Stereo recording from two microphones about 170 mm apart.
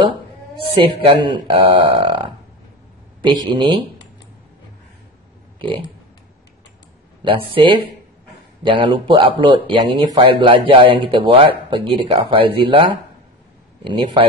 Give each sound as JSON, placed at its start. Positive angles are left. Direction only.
{"t": 1.0, "sound": "speech", "side_deg": -30}
{"t": 3.5, "sound": "speech", "side_deg": -25}
{"t": 5.6, "sound": "a sound", "side_deg": -30}
{"t": 7.2, "sound": "speech", "side_deg": -30}